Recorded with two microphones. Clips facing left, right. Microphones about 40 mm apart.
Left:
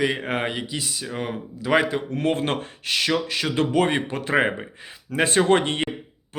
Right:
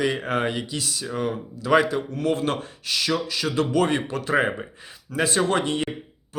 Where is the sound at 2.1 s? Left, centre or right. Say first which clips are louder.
Left 1 dB; left.